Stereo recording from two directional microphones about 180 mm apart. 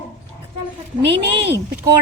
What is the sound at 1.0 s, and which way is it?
Speech, 70° right (ahead or behind).